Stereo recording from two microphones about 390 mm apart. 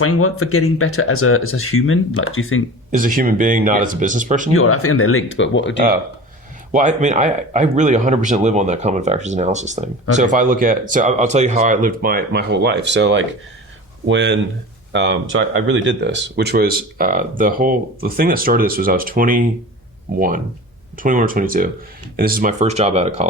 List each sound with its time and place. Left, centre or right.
0.0 s speech: left
2.9 s speech: right
4.5 s speech: left
6.7 s speech: centre